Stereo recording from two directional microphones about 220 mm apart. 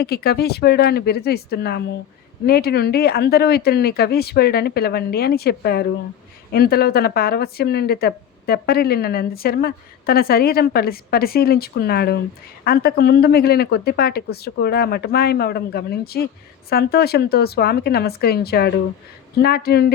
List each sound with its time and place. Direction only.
0.0 s speech: 45° left (ahead or behind)